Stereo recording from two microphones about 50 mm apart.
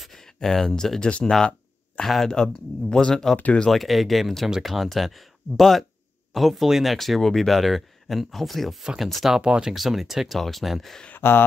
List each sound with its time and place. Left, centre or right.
0.0 s speech: centre
2.3 s speech: centre
3.7 s speech: centre
8.8 s speech: centre
9.4 s speech: centre
9.8 s speech: centre
11.1 s speech: left